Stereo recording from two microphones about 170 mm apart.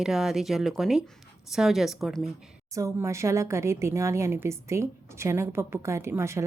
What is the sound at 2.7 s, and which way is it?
A woman's voice, 15° right (ahead or behind).